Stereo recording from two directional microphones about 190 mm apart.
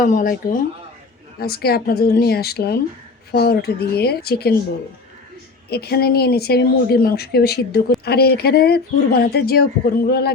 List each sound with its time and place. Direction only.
0.0 s speech: 45° left (ahead or behind)
5.6 s speech: 55° left (ahead or behind)